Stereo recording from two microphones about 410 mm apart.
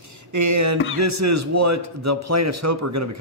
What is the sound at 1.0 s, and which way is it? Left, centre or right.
A man's voice, right.